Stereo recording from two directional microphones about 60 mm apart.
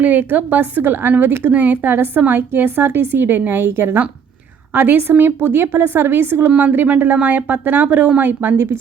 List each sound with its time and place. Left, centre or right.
0.0 s speech: right
6.6 s speech: right